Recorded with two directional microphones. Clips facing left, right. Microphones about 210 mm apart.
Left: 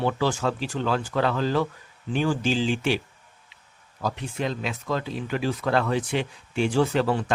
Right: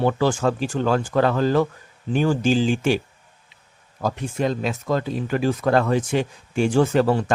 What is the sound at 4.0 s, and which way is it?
Speech, 45° right (ahead or behind).